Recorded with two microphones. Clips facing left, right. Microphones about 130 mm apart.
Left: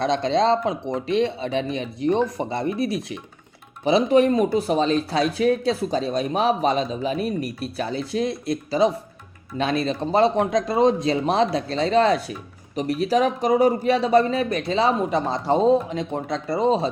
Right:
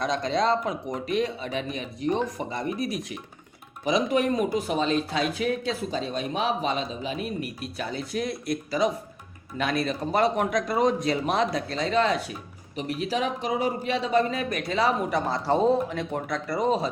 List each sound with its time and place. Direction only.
0.0 s speech: 25° left (ahead or behind)